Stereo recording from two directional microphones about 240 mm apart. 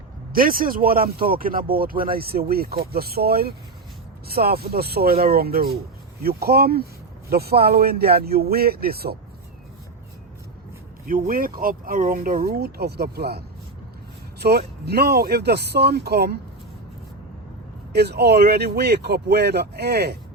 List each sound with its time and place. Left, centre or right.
0.3 s speech: right
11.0 s speech: right
17.9 s speech: right